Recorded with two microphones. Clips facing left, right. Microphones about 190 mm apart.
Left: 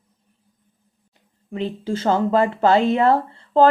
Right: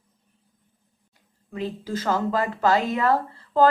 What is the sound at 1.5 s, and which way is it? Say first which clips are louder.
Speech: left 4 dB; 25° left (ahead or behind).